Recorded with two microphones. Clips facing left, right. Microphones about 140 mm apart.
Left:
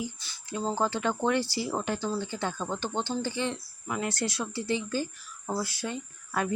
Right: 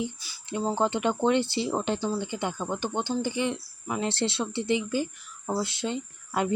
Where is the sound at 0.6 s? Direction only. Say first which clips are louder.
Right 3 dB; 20° right (ahead or behind).